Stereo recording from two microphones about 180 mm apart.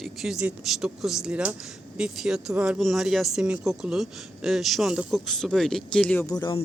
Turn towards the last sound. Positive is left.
turn(degrees=25)  # may be behind; listen again after turning